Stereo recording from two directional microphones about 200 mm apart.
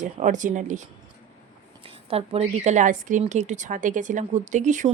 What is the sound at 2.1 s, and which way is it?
Speech, 30° right (ahead or behind).